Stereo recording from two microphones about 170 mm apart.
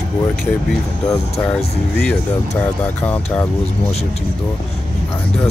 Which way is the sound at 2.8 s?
10° left (ahead or behind).